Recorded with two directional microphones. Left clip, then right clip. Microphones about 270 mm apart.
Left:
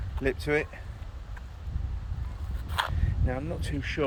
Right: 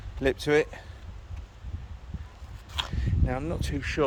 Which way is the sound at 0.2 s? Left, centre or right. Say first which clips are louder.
Right 4 dB; centre.